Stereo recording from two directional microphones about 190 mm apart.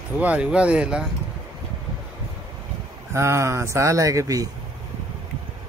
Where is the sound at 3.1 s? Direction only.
15° right (ahead or behind).